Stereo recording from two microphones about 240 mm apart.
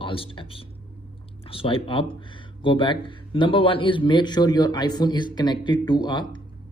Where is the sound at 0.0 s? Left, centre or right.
Left.